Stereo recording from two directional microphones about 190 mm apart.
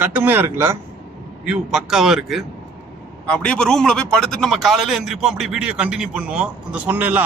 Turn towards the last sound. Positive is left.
turn(degrees=-10)  # may be behind; listen again after turning